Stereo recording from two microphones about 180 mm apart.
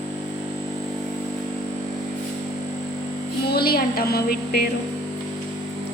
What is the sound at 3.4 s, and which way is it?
A woman's voice, 60° left (ahead or behind).